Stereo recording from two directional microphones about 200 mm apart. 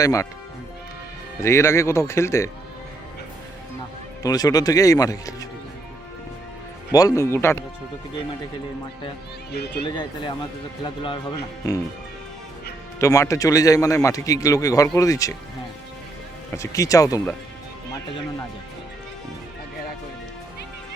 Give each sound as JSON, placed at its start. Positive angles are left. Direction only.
{"t": 0.0, "sound": "a man's voice", "side_deg": 15}
{"t": 1.4, "sound": "a man's voice", "side_deg": 15}
{"t": 4.2, "sound": "a man's voice", "side_deg": 20}
{"t": 6.9, "sound": "a man's voice", "side_deg": 15}
{"t": 9.5, "sound": "speech", "side_deg": 55}
{"t": 9.8, "sound": "speech", "side_deg": 25}
{"t": 13.0, "sound": "a man's voice", "side_deg": 15}
{"t": 16.6, "sound": "a man's voice", "side_deg": 15}